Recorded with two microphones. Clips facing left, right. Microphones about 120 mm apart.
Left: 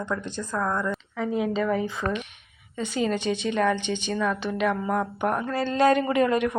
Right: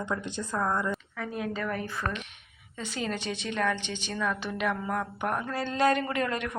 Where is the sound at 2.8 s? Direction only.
Centre (ahead or behind).